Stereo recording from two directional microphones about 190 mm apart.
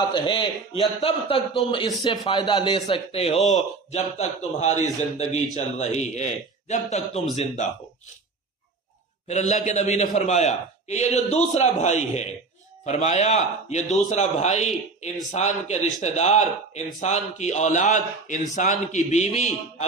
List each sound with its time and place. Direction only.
0.1 s a man's voice: 25° left (ahead or behind)
9.3 s a man's voice: 40° left (ahead or behind)